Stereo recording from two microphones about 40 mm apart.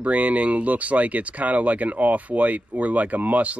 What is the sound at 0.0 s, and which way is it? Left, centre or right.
Speech, right.